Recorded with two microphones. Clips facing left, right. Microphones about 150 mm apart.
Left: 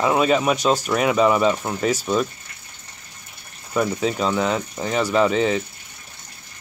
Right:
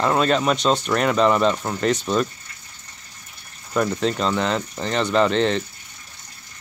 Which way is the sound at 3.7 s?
5° left (ahead or behind).